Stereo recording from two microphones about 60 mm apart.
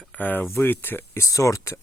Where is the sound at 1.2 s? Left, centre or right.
Left.